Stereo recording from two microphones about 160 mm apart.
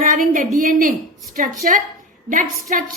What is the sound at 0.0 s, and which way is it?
A woman's voice, 55° right (ahead or behind).